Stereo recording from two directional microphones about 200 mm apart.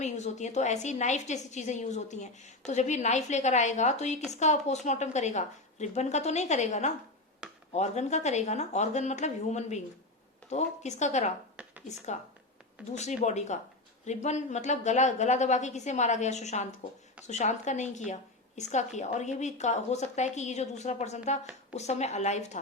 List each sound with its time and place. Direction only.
0.0 s a woman's voice: 35° left (ahead or behind)